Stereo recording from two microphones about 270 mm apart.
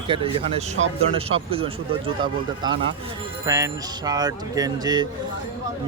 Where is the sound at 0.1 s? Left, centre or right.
Centre.